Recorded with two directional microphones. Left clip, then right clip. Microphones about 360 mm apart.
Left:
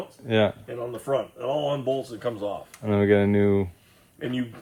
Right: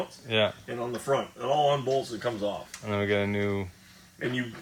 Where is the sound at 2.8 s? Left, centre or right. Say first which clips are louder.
Left 7 dB; left.